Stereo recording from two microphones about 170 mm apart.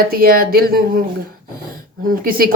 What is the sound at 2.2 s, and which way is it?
Speech, 60° right (ahead or behind).